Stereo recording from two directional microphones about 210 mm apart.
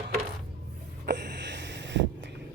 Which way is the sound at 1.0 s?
55° right (ahead or behind).